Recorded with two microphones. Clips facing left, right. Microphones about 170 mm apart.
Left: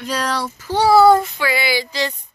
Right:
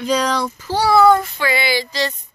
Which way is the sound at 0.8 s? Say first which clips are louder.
Left 2 dB; 30° left (ahead or behind).